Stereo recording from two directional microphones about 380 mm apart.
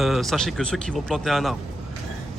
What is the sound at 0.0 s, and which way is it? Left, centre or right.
Speech, centre.